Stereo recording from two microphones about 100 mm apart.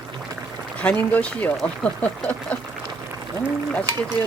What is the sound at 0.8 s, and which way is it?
Speech, 15° left (ahead or behind).